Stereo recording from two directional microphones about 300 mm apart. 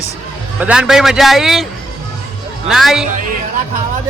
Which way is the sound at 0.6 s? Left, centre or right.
Centre.